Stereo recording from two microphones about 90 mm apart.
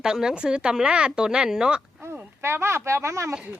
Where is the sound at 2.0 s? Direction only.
30° right (ahead or behind).